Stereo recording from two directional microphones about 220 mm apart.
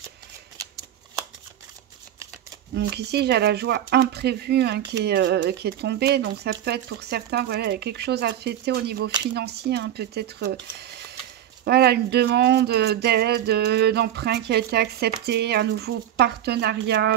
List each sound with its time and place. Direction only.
2.7 s speech: 50° right (ahead or behind)